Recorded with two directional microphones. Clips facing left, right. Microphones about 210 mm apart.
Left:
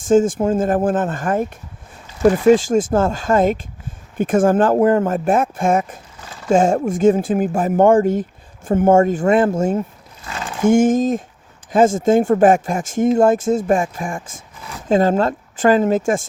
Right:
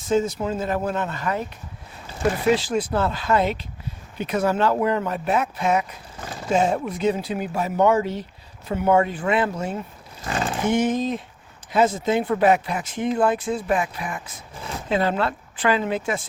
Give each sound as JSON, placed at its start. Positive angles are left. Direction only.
{"t": 0.0, "sound": "speech", "side_deg": 50}